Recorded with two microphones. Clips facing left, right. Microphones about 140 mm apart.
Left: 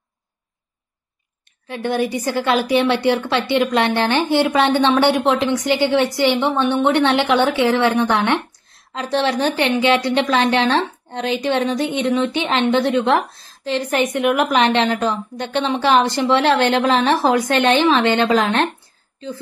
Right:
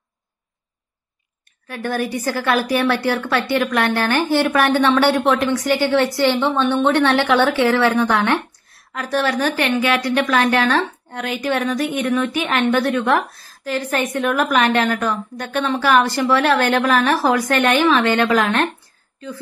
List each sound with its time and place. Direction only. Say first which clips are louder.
1.7 s a woman's voice: left 2 dB; 20° left (ahead or behind)